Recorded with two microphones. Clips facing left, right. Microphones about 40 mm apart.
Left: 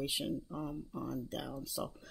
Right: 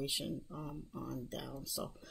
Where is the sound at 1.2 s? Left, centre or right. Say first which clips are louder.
Left 3 dB; centre.